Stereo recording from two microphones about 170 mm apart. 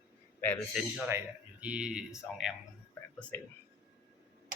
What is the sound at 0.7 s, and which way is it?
Speech, 5° right (ahead or behind).